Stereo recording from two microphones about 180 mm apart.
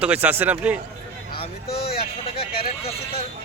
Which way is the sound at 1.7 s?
60° left (ahead or behind).